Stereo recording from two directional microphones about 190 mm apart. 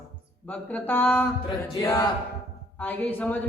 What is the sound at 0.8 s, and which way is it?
Speech, 5° left (ahead or behind).